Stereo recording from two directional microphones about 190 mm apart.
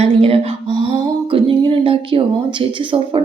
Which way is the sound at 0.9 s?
25° right (ahead or behind).